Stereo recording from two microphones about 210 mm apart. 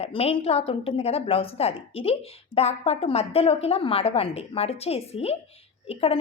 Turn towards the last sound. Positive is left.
turn(degrees=30)  # may be behind; listen again after turning